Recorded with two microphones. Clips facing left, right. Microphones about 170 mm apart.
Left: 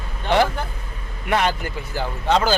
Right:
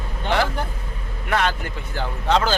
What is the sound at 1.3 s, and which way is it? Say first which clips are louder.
Speech: left 2 dB; 15° left (ahead or behind).